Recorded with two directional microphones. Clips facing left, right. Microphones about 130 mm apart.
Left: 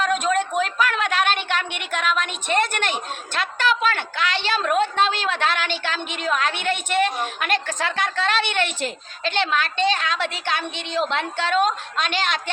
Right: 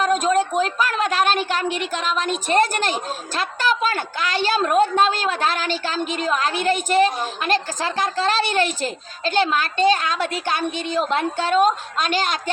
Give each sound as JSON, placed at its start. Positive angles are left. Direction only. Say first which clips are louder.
{"t": 0.0, "sound": "a woman's voice", "louder": "right 3 dB", "side_deg": -40}